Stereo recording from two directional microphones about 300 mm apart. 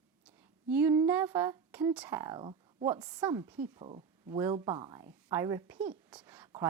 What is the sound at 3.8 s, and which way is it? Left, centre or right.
Speech, centre.